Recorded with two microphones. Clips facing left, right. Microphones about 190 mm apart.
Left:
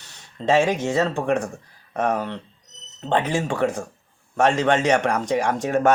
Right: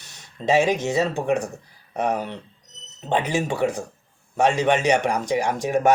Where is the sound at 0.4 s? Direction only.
15° right (ahead or behind).